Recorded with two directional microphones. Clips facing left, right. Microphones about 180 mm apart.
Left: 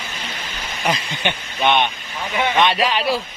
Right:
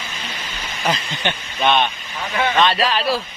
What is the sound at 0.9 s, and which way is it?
Speech, 15° left (ahead or behind).